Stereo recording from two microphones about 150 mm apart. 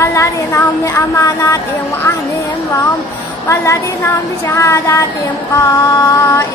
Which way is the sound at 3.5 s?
20° left (ahead or behind).